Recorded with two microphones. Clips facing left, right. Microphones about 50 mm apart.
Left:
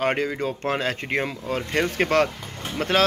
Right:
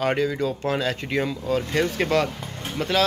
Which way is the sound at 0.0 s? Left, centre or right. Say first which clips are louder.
Right 1 dB; left.